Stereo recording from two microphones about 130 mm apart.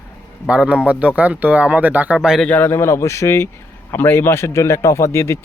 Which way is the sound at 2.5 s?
15° left (ahead or behind).